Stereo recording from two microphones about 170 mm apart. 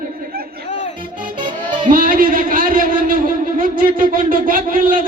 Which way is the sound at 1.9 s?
55° right (ahead or behind).